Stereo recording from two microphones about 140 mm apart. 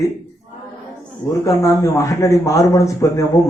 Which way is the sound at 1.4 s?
25° left (ahead or behind).